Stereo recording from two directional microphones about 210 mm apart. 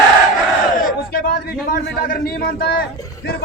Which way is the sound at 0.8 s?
45° left (ahead or behind).